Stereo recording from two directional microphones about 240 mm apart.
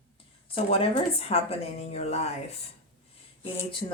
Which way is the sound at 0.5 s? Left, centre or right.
Left.